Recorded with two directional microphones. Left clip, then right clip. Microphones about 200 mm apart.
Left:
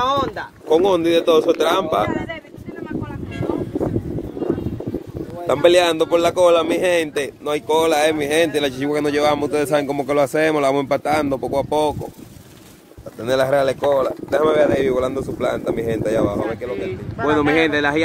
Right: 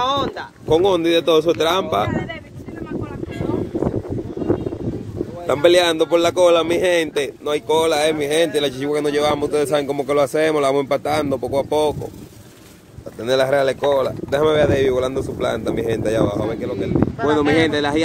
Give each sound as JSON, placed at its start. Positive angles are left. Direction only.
{"t": 0.0, "sound": "a sound", "side_deg": 15}
{"t": 0.7, "sound": "speech", "side_deg": 0}
{"t": 5.5, "sound": "speech", "side_deg": 5}
{"t": 13.2, "sound": "speech", "side_deg": -5}